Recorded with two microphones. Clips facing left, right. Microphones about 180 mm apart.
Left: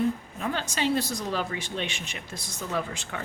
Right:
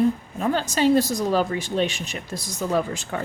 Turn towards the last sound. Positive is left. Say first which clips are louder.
# right 7 dB
turn(degrees=-40)  # may be behind; listen again after turning